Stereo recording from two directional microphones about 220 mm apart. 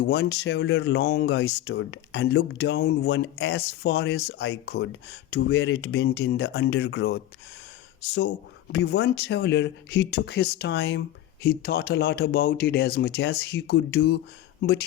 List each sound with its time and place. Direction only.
0.0 s speech: 50° left (ahead or behind)
8.7 s speech: 50° left (ahead or behind)